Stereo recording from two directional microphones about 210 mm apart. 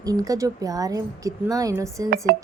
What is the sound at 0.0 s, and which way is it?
Speech, 15° right (ahead or behind).